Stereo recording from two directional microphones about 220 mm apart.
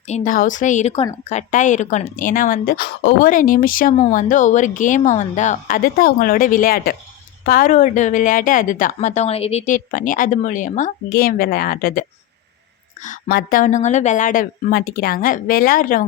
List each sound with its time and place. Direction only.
0.1 s a woman's voice: 35° left (ahead or behind)